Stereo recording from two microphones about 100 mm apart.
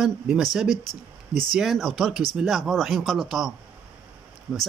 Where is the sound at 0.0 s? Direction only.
5° right (ahead or behind).